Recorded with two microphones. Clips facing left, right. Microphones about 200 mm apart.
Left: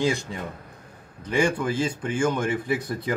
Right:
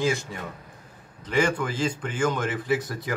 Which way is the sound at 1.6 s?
10° left (ahead or behind).